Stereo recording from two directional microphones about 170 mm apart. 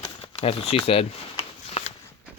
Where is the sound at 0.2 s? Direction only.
35° left (ahead or behind).